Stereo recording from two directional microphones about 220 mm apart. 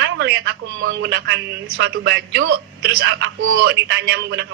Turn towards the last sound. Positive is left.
turn(degrees=-50)  # may be behind; listen again after turning